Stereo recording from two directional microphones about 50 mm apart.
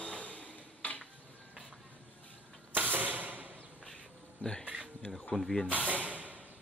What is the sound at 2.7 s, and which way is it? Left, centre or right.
Mechanisms, right.